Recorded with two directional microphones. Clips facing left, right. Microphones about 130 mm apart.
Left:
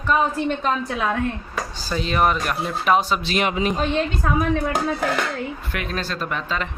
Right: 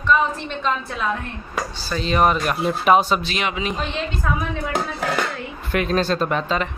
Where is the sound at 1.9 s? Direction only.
5° left (ahead or behind).